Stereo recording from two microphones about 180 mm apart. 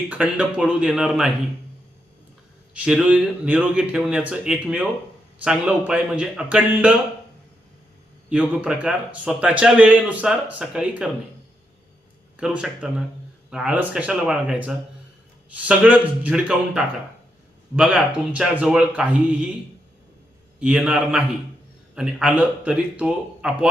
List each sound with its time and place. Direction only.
0.1 s speech: 5° right (ahead or behind)
2.7 s speech: 5° right (ahead or behind)
8.3 s speech: 5° right (ahead or behind)
12.4 s speech: 5° right (ahead or behind)
20.6 s speech: 5° right (ahead or behind)